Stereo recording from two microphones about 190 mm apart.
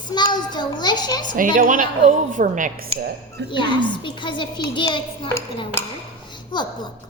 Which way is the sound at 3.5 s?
25° left (ahead or behind).